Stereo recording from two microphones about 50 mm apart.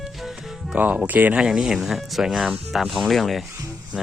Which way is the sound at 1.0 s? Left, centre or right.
Right.